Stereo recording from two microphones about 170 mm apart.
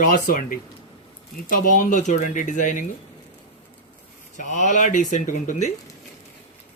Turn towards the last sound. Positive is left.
turn(degrees=45)  # may be behind; listen again after turning